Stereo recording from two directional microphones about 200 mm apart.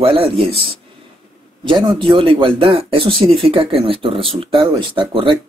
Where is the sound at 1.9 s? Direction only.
25° right (ahead or behind).